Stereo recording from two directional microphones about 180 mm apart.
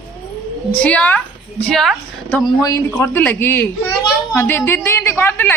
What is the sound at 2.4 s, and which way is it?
A child's voice, 20° left (ahead or behind).